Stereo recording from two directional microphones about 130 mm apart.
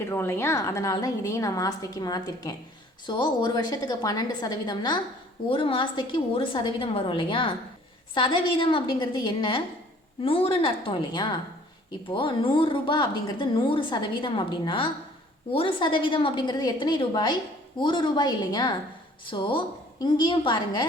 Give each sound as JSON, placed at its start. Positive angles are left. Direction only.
{"t": 0.1, "sound": "a woman's voice", "side_deg": 20}